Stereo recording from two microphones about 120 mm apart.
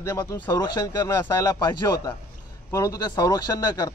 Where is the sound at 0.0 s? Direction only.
25° left (ahead or behind).